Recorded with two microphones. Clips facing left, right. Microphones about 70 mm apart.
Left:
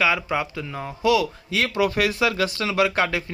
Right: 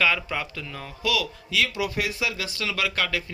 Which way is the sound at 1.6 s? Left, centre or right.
Left.